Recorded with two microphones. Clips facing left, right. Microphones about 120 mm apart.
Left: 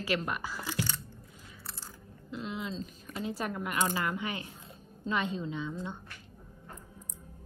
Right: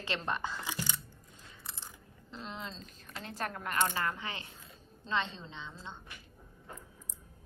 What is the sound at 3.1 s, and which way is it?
Speech, 5° left (ahead or behind).